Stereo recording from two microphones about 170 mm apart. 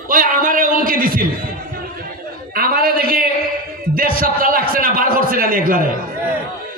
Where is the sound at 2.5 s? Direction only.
60° right (ahead or behind).